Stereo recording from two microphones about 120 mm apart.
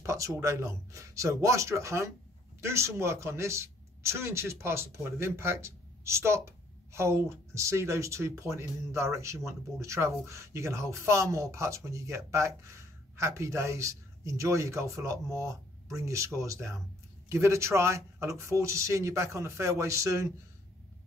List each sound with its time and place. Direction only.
0.0 s speech: 25° right (ahead or behind)